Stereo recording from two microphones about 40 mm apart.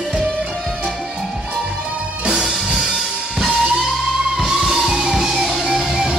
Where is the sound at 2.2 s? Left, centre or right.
Right.